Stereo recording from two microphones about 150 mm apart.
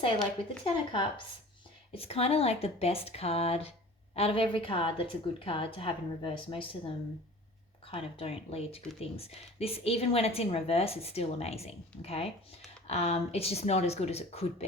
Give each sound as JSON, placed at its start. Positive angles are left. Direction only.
{"t": 0.2, "sound": "speech", "side_deg": 35}